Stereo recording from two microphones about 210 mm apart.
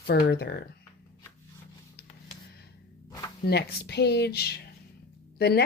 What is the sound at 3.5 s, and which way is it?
Speech, 50° left (ahead or behind).